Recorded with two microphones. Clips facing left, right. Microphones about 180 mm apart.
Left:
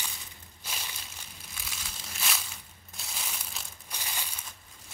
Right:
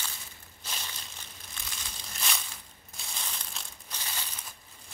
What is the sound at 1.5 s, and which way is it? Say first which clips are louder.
Crumpling: even; 5° left (ahead or behind).